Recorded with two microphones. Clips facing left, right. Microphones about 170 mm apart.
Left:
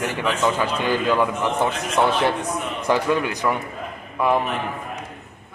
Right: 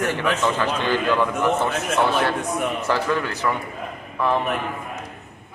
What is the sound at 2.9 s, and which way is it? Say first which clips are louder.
Speech: left 6 dB; 15° left (ahead or behind).